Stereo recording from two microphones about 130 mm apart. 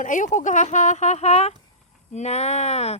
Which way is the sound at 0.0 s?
80° left.